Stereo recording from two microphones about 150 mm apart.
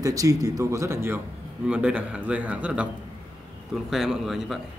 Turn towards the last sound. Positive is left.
turn(degrees=0)  # may be behind; listen again after turning